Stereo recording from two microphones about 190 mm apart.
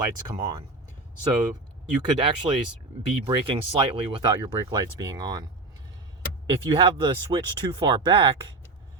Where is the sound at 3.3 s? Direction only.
25° right (ahead or behind).